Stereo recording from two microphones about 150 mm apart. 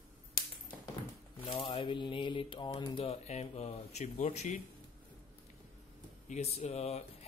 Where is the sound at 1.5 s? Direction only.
35° left (ahead or behind); by 4.6 s 50° left (ahead or behind).